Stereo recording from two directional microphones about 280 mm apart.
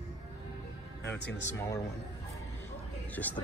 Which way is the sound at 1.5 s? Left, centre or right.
Centre.